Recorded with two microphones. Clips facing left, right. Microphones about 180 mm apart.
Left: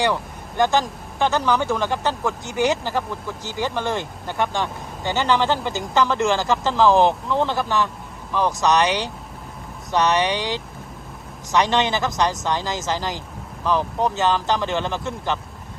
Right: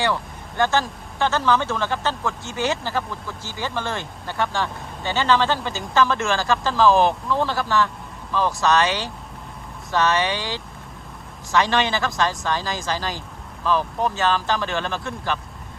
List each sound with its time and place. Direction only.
0.0 s speech: 15° left (ahead or behind)